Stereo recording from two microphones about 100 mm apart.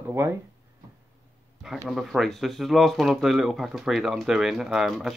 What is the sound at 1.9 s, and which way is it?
Speech, centre (ahead or behind).